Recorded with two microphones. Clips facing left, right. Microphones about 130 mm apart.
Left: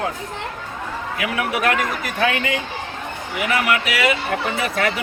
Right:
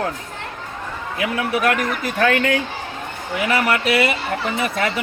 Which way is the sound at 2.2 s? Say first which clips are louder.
Right 3 dB; 50° right (ahead or behind).